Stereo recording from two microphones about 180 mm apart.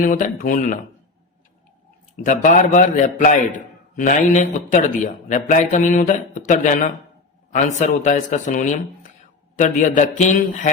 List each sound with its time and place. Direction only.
0.0 s a man's voice: 50° left (ahead or behind)
2.2 s a man's voice: 45° left (ahead or behind)